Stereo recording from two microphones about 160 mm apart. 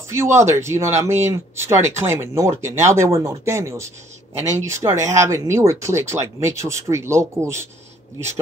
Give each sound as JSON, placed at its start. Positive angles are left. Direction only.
{"t": 0.4, "sound": "speech", "side_deg": -15}